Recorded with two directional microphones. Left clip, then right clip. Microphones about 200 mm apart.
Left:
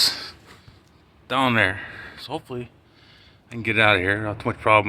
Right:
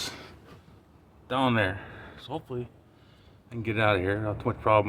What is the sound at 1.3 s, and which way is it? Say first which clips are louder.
A man's voice: left 6 dB; 15° left (ahead or behind).